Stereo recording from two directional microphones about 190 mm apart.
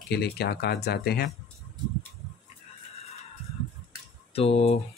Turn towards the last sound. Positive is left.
turn(degrees=30)  # may be behind; listen again after turning